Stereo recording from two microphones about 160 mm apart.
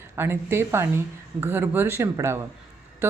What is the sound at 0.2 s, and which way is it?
Speech, 15° right (ahead or behind).